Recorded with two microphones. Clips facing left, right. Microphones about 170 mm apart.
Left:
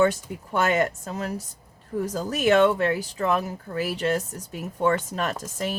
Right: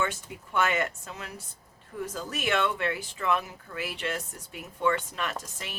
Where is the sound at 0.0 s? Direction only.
40° left (ahead or behind).